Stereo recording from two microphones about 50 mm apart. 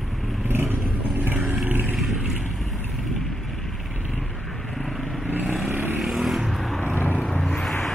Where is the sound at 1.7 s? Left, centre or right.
Right.